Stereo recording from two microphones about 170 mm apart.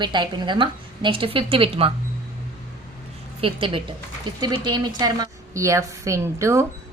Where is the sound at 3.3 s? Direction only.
30° right (ahead or behind).